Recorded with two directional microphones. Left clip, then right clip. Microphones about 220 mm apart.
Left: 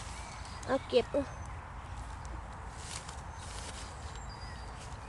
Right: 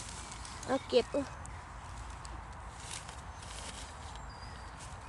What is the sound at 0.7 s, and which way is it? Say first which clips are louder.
Speech: left 1 dB; 10° right (ahead or behind).